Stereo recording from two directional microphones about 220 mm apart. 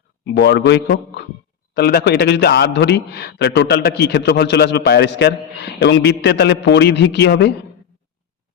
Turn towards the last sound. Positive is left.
turn(degrees=50)  # may be behind; listen again after turning